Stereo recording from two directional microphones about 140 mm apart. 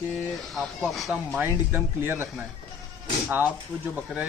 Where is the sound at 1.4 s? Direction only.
15° right (ahead or behind).